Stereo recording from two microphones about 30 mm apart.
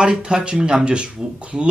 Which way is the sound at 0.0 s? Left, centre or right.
Right.